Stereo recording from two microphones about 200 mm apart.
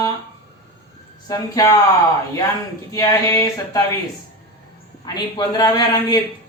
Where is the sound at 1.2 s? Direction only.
20° left (ahead or behind).